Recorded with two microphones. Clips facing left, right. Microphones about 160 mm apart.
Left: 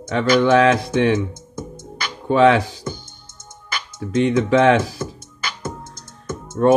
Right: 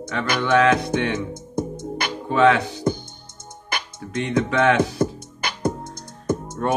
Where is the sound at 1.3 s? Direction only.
55° right (ahead or behind).